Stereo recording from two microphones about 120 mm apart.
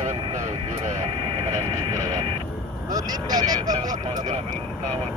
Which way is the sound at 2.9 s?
35° right (ahead or behind).